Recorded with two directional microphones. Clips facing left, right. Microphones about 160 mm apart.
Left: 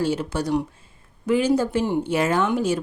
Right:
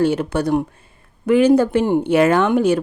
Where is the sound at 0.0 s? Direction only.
60° right (ahead or behind).